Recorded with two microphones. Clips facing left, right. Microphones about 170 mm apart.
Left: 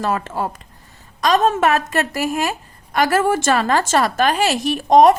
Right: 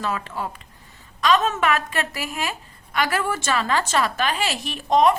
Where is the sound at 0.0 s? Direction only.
45° left (ahead or behind).